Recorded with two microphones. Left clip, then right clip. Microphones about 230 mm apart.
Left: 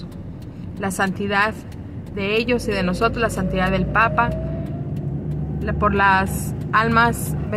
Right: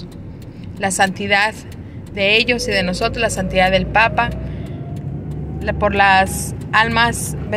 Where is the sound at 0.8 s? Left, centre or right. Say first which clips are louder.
Right 6 dB; centre.